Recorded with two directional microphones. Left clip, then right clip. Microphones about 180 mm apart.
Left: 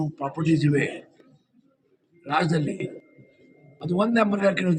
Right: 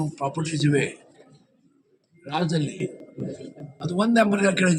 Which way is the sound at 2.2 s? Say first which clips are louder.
Left 3 dB; 15° right (ahead or behind).